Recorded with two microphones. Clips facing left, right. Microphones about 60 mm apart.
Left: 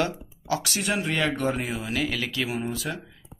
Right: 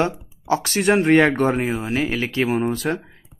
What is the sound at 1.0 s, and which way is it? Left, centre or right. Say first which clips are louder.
Speech: right 13 dB; right.